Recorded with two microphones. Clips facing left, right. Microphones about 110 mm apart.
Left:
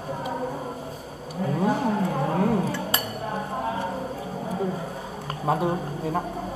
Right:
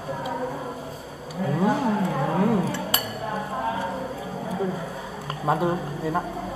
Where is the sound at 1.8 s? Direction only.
40° left (ahead or behind).